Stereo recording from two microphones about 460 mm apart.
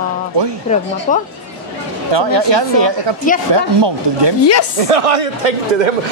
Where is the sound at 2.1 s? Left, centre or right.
Right.